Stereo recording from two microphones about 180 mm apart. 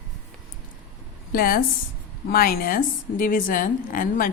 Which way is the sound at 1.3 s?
55° left (ahead or behind).